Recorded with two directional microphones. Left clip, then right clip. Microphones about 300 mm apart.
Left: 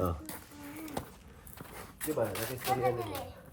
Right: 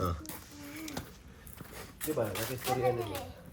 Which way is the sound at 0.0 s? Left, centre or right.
Centre.